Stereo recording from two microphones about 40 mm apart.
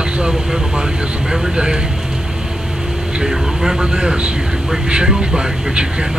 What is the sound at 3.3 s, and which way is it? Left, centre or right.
Speech, centre.